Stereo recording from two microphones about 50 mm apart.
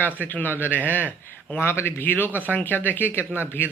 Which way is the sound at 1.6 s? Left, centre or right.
Left.